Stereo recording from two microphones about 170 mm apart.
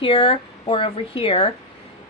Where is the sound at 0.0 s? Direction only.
30° left (ahead or behind).